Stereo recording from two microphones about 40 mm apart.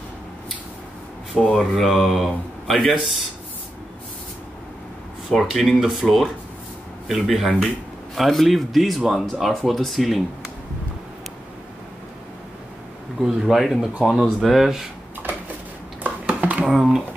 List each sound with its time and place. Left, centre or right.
1.3 s speech: centre
2.9 s speech: centre
5.3 s speech: centre
13.2 s speech: centre
16.0 s a sound: right
16.6 s speech: centre